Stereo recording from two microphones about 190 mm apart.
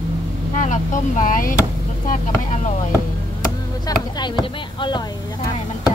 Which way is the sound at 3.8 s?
20° left (ahead or behind).